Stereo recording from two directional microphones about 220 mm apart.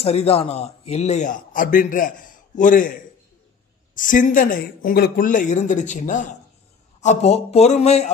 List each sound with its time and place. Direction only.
0.0 s a man's voice: 30° left (ahead or behind)
3.9 s a man's voice: 35° left (ahead or behind)